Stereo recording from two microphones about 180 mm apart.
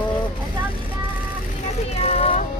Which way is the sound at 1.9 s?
35° left (ahead or behind).